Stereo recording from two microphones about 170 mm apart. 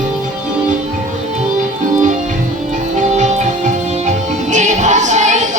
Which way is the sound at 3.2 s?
45° right (ahead or behind).